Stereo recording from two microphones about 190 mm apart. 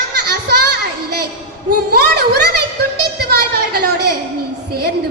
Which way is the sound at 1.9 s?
55° right (ahead or behind).